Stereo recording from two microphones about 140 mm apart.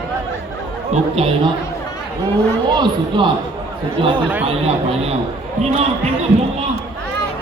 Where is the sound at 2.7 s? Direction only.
30° right (ahead or behind).